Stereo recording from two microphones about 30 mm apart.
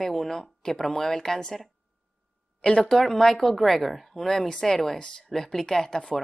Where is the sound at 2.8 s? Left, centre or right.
Centre.